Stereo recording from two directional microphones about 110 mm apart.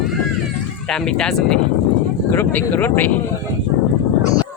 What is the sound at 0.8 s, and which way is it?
Speech, 5° left (ahead or behind).